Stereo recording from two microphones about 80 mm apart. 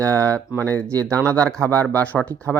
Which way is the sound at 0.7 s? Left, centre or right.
Centre.